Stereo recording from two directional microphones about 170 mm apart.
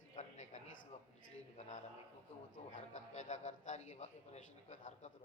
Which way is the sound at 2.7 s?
45° left (ahead or behind).